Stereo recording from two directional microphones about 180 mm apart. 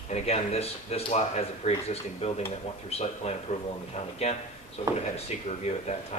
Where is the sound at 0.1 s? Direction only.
35° left (ahead or behind).